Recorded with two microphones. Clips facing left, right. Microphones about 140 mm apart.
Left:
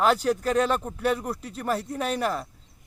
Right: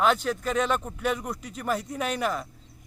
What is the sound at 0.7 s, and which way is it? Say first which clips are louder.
Speech: left 2 dB; 5° left (ahead or behind).